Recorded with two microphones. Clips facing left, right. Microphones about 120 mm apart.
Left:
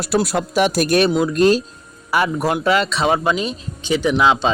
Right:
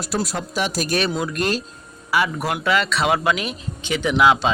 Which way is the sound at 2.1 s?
45° left (ahead or behind).